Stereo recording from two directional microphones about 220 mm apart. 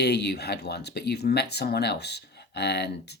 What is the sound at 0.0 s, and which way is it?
Speech, 50° left (ahead or behind).